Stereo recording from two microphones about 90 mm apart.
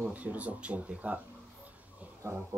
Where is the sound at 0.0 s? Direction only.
15° right (ahead or behind).